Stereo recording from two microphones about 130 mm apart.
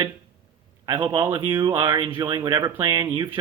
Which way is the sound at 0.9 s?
35° right (ahead or behind).